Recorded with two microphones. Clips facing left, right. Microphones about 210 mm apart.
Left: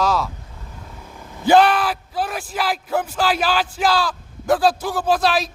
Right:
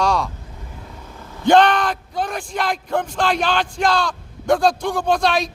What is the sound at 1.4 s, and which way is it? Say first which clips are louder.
Speech: even; 5° left (ahead or behind).